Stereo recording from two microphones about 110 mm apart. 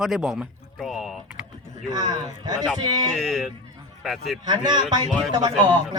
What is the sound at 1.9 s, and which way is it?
A man's voice, 40° right (ahead or behind).